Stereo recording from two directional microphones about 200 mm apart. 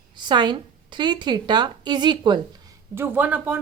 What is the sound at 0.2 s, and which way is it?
A woman's voice, 20° right (ahead or behind).